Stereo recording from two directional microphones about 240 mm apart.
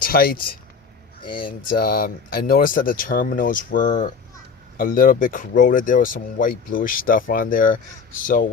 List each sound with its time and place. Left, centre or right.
0.0 s speech: left
1.7 s speech: left